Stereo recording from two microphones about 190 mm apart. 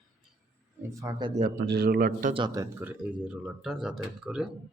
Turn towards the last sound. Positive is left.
turn(degrees=-5)  # may be behind; listen again after turning